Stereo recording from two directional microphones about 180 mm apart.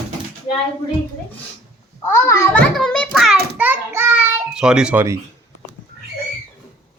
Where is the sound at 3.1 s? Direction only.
Centre (ahead or behind).